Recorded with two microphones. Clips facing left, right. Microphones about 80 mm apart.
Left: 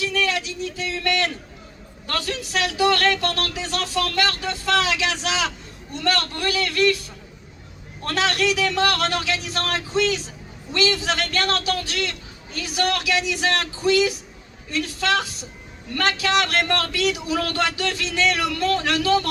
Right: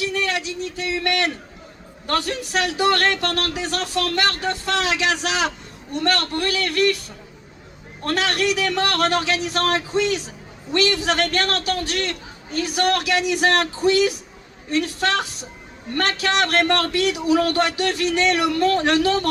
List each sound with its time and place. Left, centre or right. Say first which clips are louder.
0.0 s a sound: even; right
2.0 s a man's voice: right 4 dB; right
8.0 s a man's voice: right 1 dB; right